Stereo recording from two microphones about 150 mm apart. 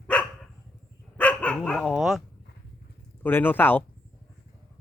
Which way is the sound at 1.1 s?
10° left (ahead or behind).